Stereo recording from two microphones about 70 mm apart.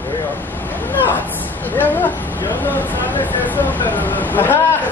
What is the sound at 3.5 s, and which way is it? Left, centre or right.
Speech, left.